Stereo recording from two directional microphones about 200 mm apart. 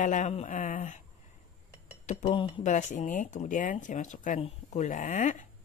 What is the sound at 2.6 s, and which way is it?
Speech, 35° left (ahead or behind).